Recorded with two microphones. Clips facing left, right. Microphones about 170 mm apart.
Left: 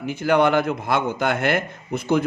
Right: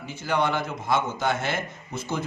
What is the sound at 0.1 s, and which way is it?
A man's voice, 60° left (ahead or behind).